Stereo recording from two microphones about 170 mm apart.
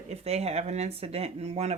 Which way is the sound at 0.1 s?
40° right (ahead or behind).